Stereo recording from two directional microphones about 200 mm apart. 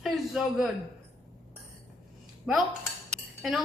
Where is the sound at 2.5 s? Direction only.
Centre (ahead or behind).